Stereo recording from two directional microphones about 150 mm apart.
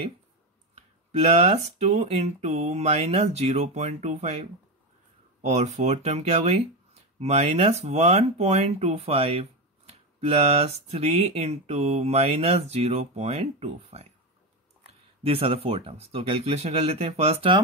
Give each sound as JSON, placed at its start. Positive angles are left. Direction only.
{"t": 0.7, "sound": "speech", "side_deg": -45}